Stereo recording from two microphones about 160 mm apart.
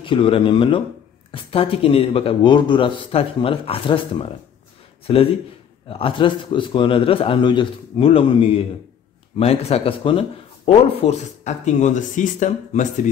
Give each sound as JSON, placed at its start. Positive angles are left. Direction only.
{"t": 0.0, "sound": "speech", "side_deg": 35}